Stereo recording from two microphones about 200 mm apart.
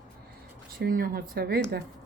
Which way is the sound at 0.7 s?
45° right (ahead or behind).